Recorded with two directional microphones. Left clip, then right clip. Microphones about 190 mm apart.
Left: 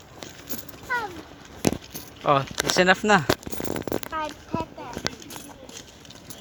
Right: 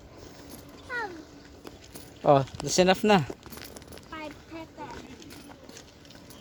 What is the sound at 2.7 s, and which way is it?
Speech, 25° right (ahead or behind).